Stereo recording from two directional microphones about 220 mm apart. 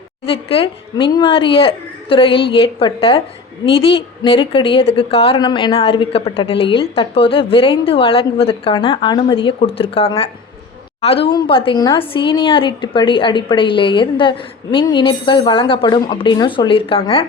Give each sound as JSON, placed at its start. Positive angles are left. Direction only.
{"t": 0.3, "sound": "a woman's voice", "side_deg": 25}